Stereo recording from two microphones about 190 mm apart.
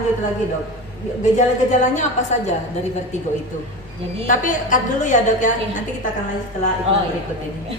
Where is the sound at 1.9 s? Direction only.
35° left (ahead or behind).